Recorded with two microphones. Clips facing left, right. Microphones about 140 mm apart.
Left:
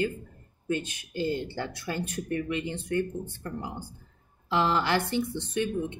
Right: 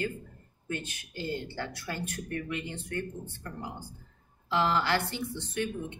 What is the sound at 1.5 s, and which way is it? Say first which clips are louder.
Speech: left 4 dB; 20° left (ahead or behind).